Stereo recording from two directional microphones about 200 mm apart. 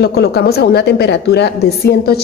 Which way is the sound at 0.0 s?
55° left (ahead or behind).